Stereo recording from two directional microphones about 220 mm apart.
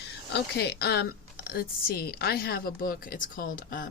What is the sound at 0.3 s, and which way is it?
A woman's voice, 45° left (ahead or behind).